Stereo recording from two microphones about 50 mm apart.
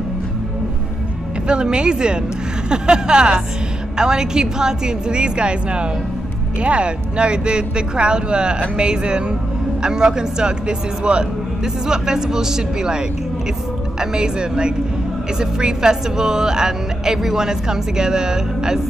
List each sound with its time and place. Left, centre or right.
1.5 s speech: centre